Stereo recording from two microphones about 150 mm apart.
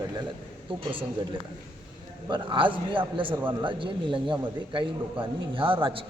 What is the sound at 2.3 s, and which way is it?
A man's voice, 35° right (ahead or behind).